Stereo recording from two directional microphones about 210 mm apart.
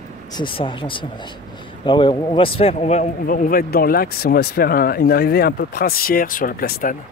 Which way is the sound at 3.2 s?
40° left (ahead or behind).